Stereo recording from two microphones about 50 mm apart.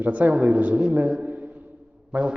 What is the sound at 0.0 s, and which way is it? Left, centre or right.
A man's voice, right.